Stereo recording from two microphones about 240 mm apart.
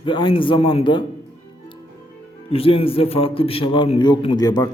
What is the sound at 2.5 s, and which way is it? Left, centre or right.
A man's voice, left.